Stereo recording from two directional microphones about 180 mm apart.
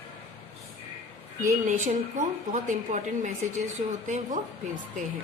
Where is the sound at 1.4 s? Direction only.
45° right (ahead or behind).